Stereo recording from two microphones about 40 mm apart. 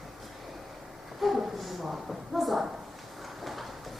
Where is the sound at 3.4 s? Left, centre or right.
Centre.